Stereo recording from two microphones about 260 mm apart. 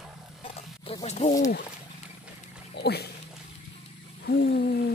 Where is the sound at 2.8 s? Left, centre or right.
Left.